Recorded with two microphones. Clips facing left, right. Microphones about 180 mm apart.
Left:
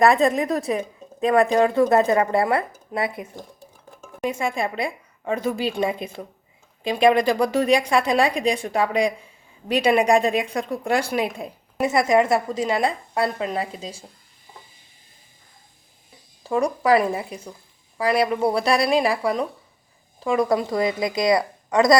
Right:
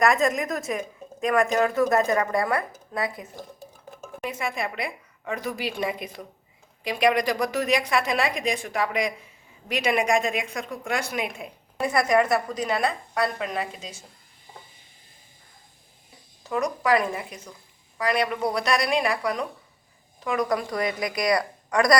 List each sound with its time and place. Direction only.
0.0 s a woman's voice: 30° left (ahead or behind)
16.4 s a woman's voice: 30° left (ahead or behind)